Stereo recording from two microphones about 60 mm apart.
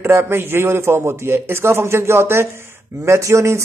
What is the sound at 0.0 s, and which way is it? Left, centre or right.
A man's voice, right.